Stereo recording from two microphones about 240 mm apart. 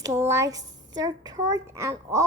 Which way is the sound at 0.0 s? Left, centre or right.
Centre.